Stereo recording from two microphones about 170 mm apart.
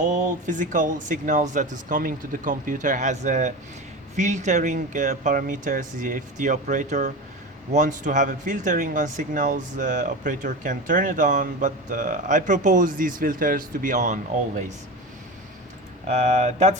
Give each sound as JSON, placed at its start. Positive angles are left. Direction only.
{"t": 0.1, "sound": "speech", "side_deg": -50}
{"t": 16.0, "sound": "speech", "side_deg": -45}